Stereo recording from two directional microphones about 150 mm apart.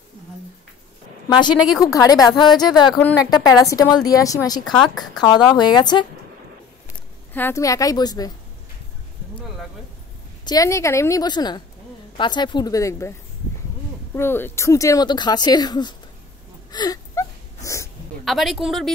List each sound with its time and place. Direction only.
1.3 s a woman's voice: 30° left (ahead or behind)
7.3 s speech: 15° left (ahead or behind)
10.4 s speech: 25° left (ahead or behind)
14.1 s speech: 15° left (ahead or behind)
16.7 s wail: 25° left (ahead or behind)
18.2 s speech: centre (ahead or behind)